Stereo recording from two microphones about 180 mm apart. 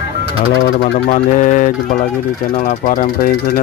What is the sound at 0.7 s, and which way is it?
Speech, 50° left (ahead or behind).